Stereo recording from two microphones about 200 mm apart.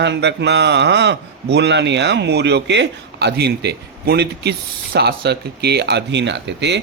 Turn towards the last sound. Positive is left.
turn(degrees=-60)  # may be behind; listen again after turning